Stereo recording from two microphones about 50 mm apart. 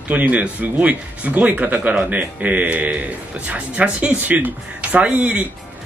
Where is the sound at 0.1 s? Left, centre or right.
Right.